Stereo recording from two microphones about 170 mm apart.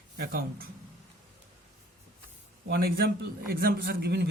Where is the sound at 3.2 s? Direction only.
60° right (ahead or behind).